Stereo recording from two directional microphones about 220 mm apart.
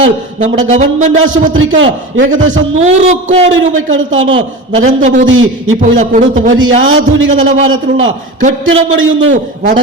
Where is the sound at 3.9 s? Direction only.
60° right (ahead or behind).